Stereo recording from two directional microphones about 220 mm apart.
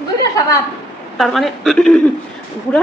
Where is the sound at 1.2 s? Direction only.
Centre (ahead or behind).